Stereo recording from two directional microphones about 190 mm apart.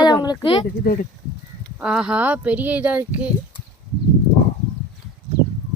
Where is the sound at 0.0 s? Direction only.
20° left (ahead or behind).